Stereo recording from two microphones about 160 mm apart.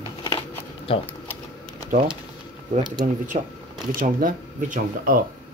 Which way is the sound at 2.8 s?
25° right (ahead or behind).